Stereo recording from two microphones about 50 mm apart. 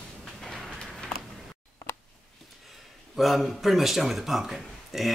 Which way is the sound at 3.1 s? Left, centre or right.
Centre.